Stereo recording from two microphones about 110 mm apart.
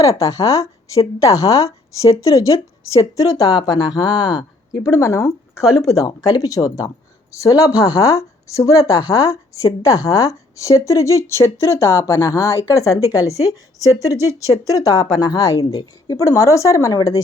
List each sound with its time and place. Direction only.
0.0 s a woman's voice: 30° left (ahead or behind)
4.7 s a woman's voice: 30° left (ahead or behind)